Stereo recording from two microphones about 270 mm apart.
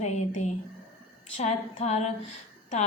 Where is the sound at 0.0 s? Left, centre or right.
Left.